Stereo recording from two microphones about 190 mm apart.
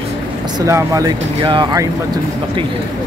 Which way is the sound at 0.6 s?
15° right (ahead or behind).